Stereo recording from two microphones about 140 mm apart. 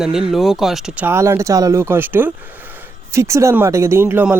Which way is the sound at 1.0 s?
20° right (ahead or behind).